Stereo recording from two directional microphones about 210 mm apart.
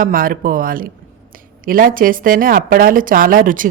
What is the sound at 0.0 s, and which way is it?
A woman's voice, 40° right (ahead or behind).